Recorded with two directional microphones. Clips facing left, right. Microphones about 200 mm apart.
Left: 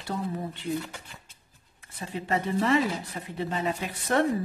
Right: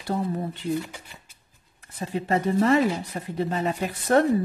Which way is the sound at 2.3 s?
40° right (ahead or behind).